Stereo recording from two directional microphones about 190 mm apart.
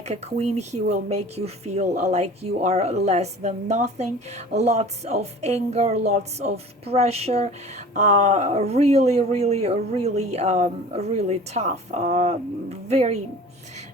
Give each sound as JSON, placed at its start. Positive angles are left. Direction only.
{"t": 0.0, "sound": "speech", "side_deg": -35}